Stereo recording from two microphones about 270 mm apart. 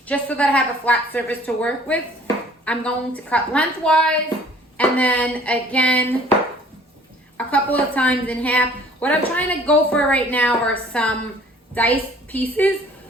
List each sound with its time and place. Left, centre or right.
0.1 s a woman's voice: centre
7.3 s a woman's voice: centre